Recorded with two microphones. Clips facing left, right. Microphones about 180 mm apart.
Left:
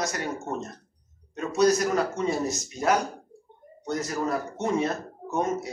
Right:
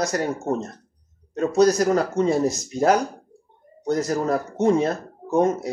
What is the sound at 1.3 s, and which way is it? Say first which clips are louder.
Speech: right 4 dB; 35° right (ahead or behind).